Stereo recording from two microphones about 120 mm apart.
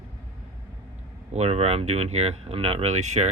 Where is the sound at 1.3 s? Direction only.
60° right (ahead or behind).